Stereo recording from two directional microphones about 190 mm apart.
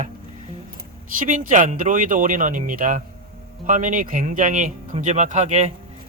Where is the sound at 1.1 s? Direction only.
45° right (ahead or behind).